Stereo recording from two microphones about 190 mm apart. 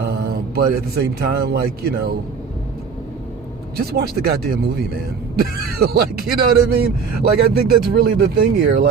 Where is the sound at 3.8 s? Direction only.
55° right (ahead or behind).